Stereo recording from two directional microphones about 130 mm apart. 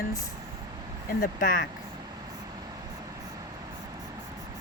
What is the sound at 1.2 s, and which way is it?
Speech, 90° left.